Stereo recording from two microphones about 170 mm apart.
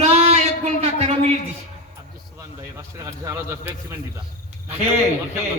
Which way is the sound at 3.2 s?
15° right (ahead or behind).